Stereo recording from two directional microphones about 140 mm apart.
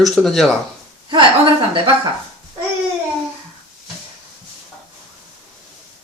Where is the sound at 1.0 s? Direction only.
35° right (ahead or behind).